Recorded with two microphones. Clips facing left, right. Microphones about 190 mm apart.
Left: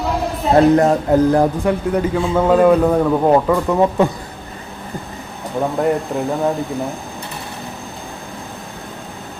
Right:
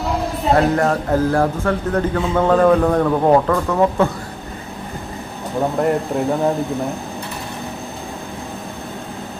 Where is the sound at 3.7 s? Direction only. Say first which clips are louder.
Left 1 dB; 15° left (ahead or behind).